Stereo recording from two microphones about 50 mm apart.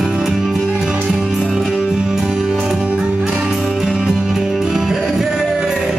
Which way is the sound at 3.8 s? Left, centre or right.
Centre.